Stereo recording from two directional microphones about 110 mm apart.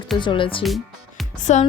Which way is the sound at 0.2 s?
50° left (ahead or behind).